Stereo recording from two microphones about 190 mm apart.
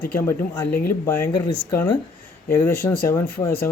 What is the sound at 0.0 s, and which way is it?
Speech, 10° left (ahead or behind).